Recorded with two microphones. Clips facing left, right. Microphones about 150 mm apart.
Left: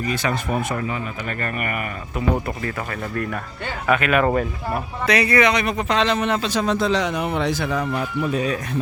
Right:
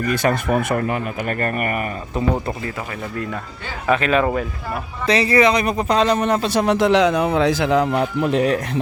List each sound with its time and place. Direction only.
0.0 s speech: 50° right (ahead or behind)
3.8 s speech: 30° right (ahead or behind)
6.5 s speech: 60° right (ahead or behind)